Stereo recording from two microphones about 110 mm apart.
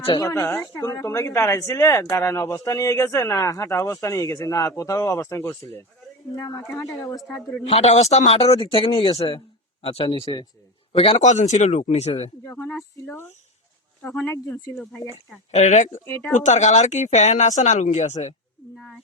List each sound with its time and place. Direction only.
0.2 s speech: 30° left (ahead or behind)
7.6 s speech: 80° left; by 10.2 s 55° left (ahead or behind)
11.2 s speech: 90° left
12.5 s speech: 25° left (ahead or behind)
15.5 s speech: 90° left